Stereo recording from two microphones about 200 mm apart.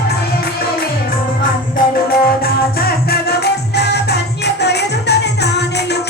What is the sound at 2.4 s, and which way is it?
Music, 50° left (ahead or behind).